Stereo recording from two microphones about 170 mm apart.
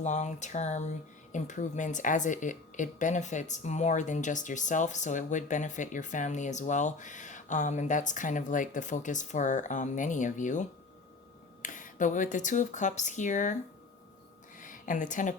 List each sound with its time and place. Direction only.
0.0 s speech: 45° left (ahead or behind)
14.6 s a woman's voice: 50° left (ahead or behind)